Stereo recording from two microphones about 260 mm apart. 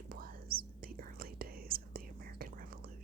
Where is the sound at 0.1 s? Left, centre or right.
Right.